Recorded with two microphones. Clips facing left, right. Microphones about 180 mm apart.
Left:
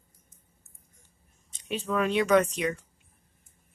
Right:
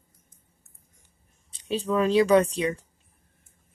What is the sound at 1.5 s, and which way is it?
Speech, 35° right (ahead or behind).